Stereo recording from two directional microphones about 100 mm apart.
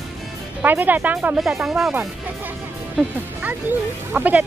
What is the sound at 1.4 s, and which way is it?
Speech, centre (ahead or behind).